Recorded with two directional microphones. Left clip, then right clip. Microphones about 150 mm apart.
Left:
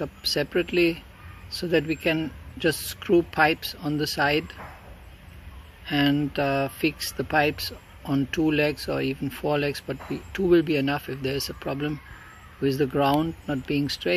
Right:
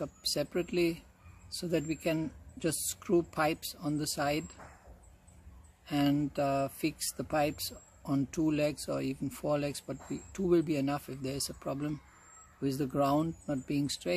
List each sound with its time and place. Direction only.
0.0 s speech: 45° right (ahead or behind)
5.9 s speech: 45° right (ahead or behind)